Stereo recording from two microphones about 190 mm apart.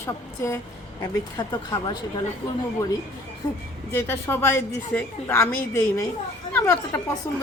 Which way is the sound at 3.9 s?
10° left (ahead or behind).